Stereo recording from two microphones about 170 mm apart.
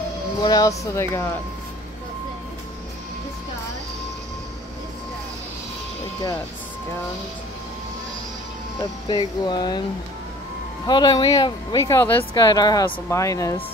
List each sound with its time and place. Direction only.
0.4 s speech: 20° left (ahead or behind)
9.0 s speech: 25° left (ahead or behind)
10.9 s speech: 25° left (ahead or behind)